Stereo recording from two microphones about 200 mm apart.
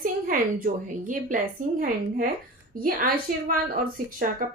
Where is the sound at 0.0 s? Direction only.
45° right (ahead or behind).